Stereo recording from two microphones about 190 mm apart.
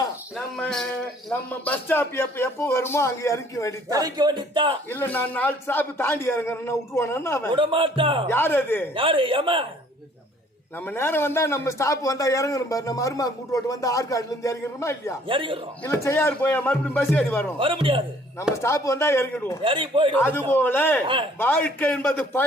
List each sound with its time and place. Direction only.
0.3 s a man's voice: centre (ahead or behind)
3.8 s speech: 20° right (ahead or behind)
4.9 s a man's voice: 10° left (ahead or behind)
7.5 s speech: 30° right (ahead or behind)
8.3 s a man's voice: 10° left (ahead or behind)
9.0 s speech: 30° right (ahead or behind)
10.8 s a man's voice: 10° left (ahead or behind)
15.3 s speech: 25° right (ahead or behind)
15.8 s a man's voice: 10° left (ahead or behind)
17.6 s speech: 30° right (ahead or behind)
18.6 s a man's voice: 15° left (ahead or behind)
19.6 s speech: 25° right (ahead or behind)
20.1 s a man's voice: 10° left (ahead or behind)